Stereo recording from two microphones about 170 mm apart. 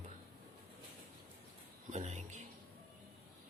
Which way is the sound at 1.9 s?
40° right (ahead or behind).